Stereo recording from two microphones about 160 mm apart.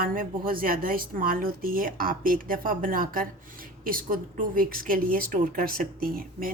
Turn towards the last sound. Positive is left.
turn(degrees=-60)  # may be behind; listen again after turning